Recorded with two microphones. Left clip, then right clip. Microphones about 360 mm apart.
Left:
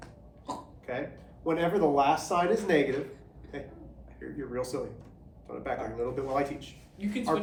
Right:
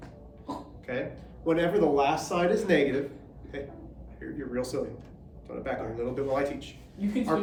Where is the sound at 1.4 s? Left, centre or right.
Centre.